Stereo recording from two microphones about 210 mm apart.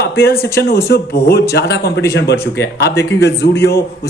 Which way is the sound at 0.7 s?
50° left (ahead or behind).